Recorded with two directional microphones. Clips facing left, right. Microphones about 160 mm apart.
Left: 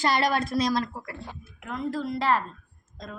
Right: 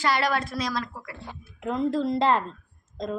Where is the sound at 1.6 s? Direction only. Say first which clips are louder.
Right 5 dB; 30° right (ahead or behind).